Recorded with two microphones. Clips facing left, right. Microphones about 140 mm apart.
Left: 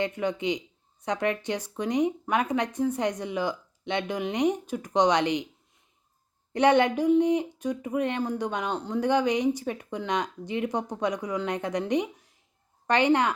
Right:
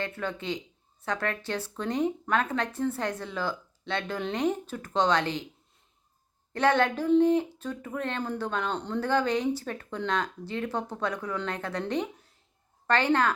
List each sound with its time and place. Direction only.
0.0 s speech: 15° left (ahead or behind)
6.5 s speech: 15° left (ahead or behind)